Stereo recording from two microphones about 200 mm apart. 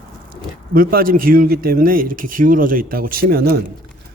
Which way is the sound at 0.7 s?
45° right (ahead or behind).